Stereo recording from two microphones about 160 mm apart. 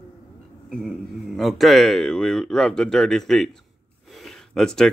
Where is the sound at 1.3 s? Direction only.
Centre (ahead or behind).